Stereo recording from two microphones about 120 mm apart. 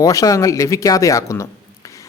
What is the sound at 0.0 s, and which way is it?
Speech, 30° left (ahead or behind).